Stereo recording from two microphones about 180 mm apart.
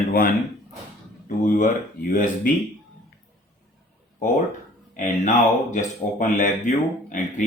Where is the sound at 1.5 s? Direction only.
50° left (ahead or behind).